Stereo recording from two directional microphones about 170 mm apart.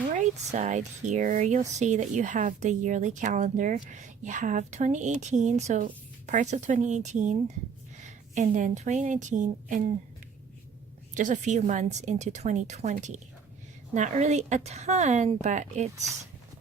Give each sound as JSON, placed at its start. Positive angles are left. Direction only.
{"t": 0.2, "sound": "a woman's voice", "side_deg": -45}
{"t": 11.1, "sound": "a woman's voice", "side_deg": -45}